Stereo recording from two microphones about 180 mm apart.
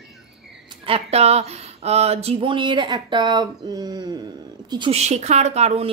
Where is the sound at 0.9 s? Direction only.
35° right (ahead or behind).